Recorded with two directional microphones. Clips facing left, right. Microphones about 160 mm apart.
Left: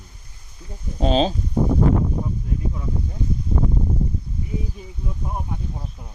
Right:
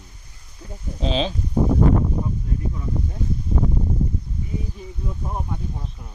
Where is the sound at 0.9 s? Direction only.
45° left (ahead or behind).